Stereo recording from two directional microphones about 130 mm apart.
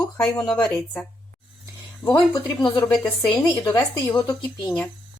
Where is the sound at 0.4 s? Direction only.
5° left (ahead or behind).